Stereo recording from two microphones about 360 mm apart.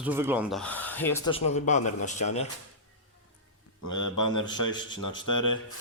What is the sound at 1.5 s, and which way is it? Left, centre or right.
Speech, centre.